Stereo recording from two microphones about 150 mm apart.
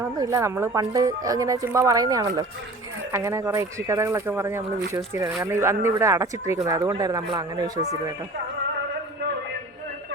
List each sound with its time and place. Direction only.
0.2 s speech: 20° right (ahead or behind)